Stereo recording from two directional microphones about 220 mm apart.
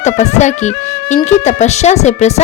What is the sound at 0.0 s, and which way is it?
Speech, 30° left (ahead or behind).